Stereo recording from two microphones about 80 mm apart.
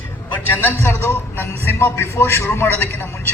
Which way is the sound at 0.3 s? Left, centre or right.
Left.